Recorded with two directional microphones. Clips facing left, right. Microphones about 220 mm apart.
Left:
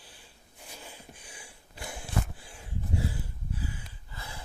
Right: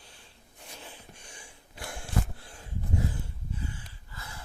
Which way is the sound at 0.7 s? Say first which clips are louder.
Even; 5° left (ahead or behind).